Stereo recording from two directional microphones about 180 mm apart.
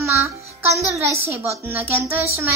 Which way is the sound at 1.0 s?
15° right (ahead or behind).